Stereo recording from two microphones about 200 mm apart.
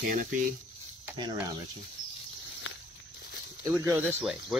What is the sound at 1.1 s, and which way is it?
Speech, 20° right (ahead or behind).